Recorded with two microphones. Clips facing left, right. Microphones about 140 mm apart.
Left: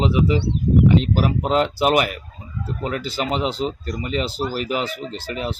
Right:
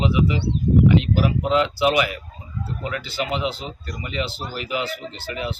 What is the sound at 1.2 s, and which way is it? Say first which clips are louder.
Speech: left 1 dB; 45° left (ahead or behind).